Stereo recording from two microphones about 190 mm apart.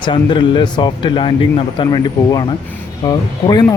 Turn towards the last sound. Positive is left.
turn(degrees=20)  # may be behind; listen again after turning